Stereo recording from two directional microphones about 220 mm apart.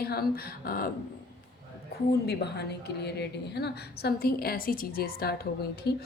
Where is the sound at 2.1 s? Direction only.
50° left (ahead or behind).